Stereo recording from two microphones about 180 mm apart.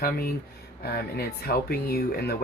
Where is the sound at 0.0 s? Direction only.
55° left (ahead or behind).